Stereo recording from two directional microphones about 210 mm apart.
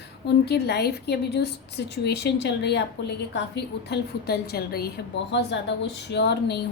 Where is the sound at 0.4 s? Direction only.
50° left (ahead or behind).